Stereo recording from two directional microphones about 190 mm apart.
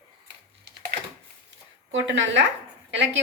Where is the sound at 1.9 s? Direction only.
75° right (ahead or behind).